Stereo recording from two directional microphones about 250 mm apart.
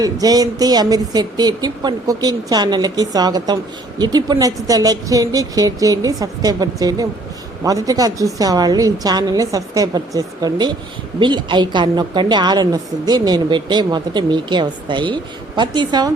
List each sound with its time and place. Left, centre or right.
0.0 s speech: centre